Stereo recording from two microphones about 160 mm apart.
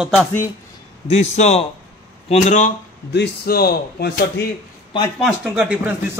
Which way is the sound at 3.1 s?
80° left.